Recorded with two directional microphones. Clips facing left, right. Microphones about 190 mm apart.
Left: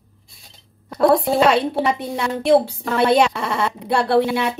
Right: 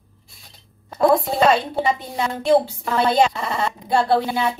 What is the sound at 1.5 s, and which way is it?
A woman's voice, 70° left (ahead or behind).